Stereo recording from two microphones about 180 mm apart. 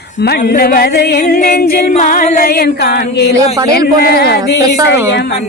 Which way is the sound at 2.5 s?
60° left (ahead or behind).